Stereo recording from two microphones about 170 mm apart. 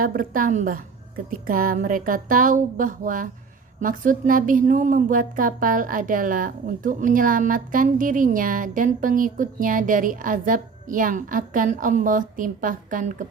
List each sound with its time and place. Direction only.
0.0 s a woman's voice: 55° right (ahead or behind)